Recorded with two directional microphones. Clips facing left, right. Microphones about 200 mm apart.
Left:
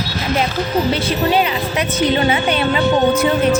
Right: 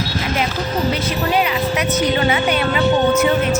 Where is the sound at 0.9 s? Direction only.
30° left (ahead or behind).